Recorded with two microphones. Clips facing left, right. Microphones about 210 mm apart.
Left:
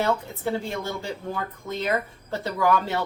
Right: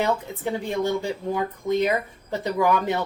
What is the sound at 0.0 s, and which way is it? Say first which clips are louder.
Speech: right 1 dB; 15° right (ahead or behind).